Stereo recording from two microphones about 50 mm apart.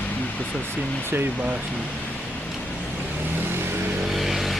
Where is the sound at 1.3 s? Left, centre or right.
Right.